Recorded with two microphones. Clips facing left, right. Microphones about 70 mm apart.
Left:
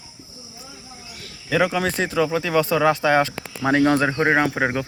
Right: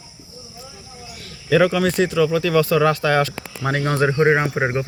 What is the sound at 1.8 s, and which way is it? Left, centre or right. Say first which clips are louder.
Speech: right 3 dB; left.